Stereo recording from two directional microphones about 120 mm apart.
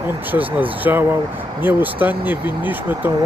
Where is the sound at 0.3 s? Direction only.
15° right (ahead or behind).